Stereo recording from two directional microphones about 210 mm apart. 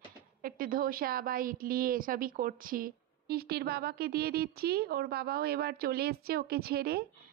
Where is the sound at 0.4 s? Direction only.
45° right (ahead or behind).